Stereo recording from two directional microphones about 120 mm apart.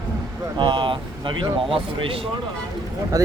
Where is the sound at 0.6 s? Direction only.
40° right (ahead or behind).